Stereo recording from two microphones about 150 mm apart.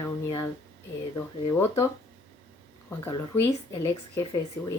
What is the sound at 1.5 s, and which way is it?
Speech, 15° left (ahead or behind).